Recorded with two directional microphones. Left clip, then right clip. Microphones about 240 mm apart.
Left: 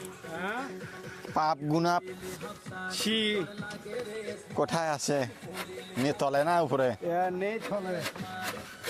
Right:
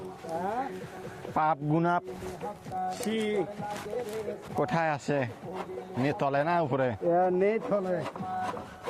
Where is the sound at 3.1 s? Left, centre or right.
Left.